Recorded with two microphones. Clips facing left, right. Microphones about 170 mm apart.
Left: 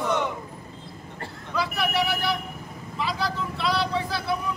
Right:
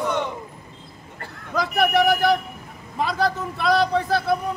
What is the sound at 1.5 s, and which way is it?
Speech, 45° right (ahead or behind).